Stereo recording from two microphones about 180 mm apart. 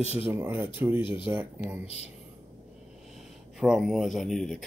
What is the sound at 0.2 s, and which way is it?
Speech, 10° right (ahead or behind).